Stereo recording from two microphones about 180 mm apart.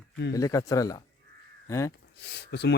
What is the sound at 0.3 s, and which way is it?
Speech, 20° left (ahead or behind).